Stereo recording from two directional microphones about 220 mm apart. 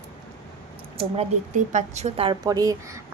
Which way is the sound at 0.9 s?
30° right (ahead or behind).